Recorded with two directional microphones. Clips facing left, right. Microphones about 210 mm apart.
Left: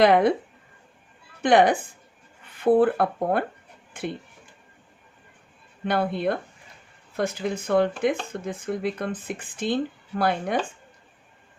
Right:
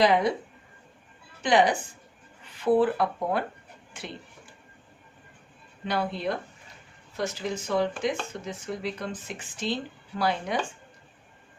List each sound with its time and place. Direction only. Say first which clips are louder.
0.0 s speech: left 5 dB; 55° left (ahead or behind)
1.4 s a woman's voice: left 4 dB; 55° left (ahead or behind)
5.8 s speech: left 5 dB; 55° left (ahead or behind)